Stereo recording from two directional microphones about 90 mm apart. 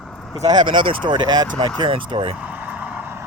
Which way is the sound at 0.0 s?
5° left (ahead or behind).